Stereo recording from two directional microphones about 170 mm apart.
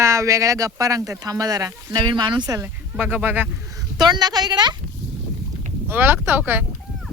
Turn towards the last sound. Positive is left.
turn(degrees=-10)  # may be behind; listen again after turning